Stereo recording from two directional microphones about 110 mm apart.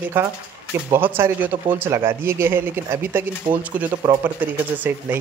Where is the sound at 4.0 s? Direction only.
40° right (ahead or behind).